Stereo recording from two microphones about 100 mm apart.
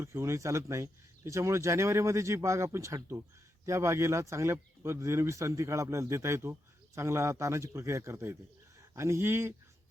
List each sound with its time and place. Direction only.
0.0 s speech: 30° right (ahead or behind)